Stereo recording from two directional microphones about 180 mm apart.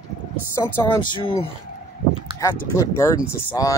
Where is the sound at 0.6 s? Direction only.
10° left (ahead or behind).